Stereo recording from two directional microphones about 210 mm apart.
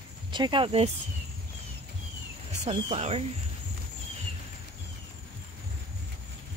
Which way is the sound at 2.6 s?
30° right (ahead or behind).